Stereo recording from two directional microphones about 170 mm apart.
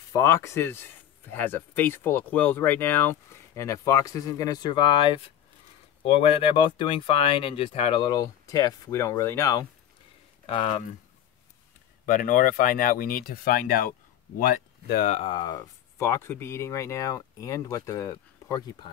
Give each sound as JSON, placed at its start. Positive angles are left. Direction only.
{"t": 0.1, "sound": "speech", "side_deg": 15}
{"t": 10.4, "sound": "speech", "side_deg": 35}
{"t": 12.1, "sound": "speech", "side_deg": 50}
{"t": 15.1, "sound": "speech", "side_deg": 25}